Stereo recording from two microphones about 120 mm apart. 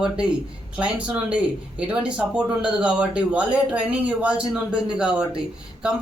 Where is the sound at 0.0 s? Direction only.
5° right (ahead or behind).